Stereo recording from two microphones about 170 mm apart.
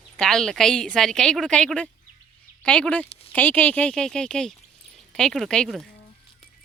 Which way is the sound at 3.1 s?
35° left (ahead or behind).